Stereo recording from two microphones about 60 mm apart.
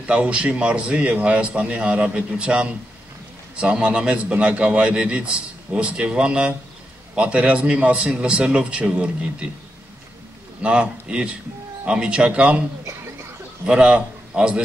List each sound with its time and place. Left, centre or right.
0.0 s a man's voice: centre
10.6 s a man's voice: centre
13.7 s a man's voice: centre